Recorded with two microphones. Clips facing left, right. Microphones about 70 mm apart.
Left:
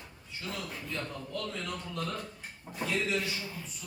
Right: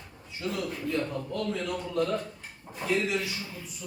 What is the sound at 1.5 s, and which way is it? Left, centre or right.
Speech, centre.